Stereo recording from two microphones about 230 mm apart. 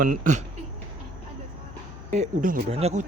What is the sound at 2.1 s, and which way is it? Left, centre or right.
Speech, right.